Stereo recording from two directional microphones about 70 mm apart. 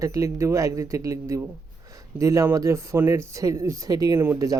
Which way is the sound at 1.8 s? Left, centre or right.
Right.